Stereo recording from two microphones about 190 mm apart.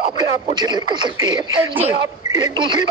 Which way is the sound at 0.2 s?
25° right (ahead or behind).